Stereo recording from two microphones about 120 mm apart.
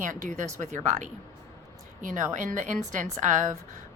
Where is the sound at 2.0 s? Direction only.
90° right.